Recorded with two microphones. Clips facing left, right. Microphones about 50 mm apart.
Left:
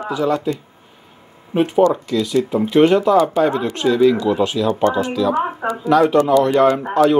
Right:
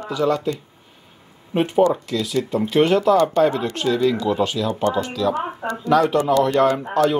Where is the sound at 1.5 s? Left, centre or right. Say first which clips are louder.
Left 3 dB; centre.